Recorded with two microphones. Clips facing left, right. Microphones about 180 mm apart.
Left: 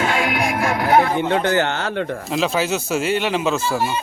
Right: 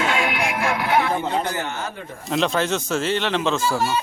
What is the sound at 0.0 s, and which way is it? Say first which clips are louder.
Music: left 2 dB; 40° left (ahead or behind).